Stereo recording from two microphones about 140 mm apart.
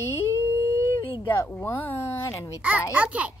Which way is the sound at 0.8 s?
20° left (ahead or behind).